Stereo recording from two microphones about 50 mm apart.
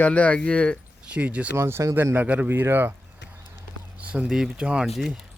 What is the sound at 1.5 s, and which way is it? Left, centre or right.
Speech, right.